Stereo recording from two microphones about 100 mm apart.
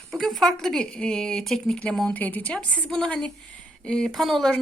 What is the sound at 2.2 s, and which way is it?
Speech, 15° left (ahead or behind).